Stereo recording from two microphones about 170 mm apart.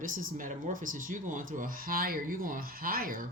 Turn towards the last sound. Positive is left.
turn(degrees=-60)  # may be behind; listen again after turning